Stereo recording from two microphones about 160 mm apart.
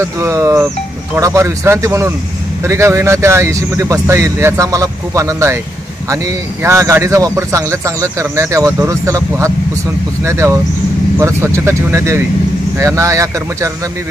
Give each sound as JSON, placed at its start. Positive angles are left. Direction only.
{"t": 0.0, "sound": "speech", "side_deg": -15}